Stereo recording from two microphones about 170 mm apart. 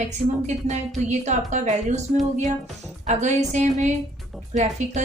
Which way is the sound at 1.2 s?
45° right (ahead or behind).